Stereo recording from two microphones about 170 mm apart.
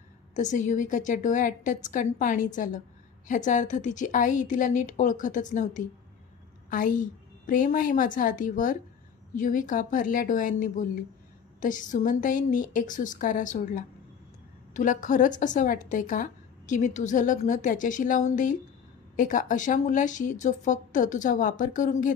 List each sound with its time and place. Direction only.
0.4 s a woman's voice: 45° left (ahead or behind)